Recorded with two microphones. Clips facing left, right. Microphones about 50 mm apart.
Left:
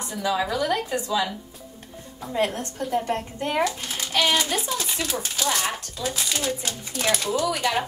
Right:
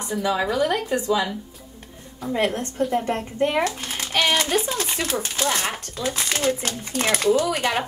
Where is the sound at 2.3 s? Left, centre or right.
Right.